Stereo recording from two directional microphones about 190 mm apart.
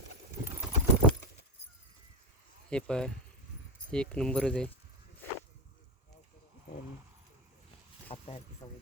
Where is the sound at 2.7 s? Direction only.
5° left (ahead or behind).